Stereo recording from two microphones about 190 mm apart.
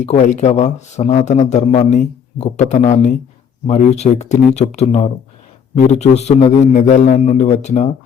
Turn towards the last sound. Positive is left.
turn(degrees=40)  # may be behind; listen again after turning